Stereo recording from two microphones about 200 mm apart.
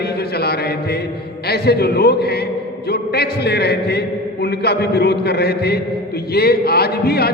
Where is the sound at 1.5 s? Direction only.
55° left (ahead or behind).